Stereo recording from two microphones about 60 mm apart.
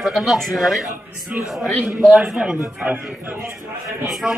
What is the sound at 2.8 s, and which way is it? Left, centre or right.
Speech, right.